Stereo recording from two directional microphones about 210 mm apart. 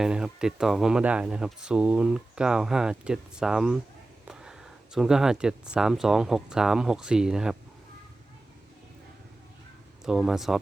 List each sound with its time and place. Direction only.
0.0 s speech: 5° right (ahead or behind)
4.3 s a sound: 5° right (ahead or behind)
4.9 s speech: 5° right (ahead or behind)
10.1 s speech: centre (ahead or behind)